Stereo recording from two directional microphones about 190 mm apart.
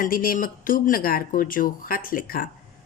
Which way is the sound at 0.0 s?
50° left (ahead or behind).